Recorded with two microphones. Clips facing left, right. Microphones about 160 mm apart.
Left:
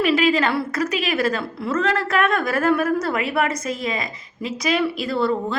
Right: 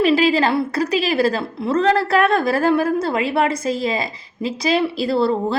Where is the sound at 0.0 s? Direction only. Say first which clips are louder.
Right 3 dB; 30° right (ahead or behind).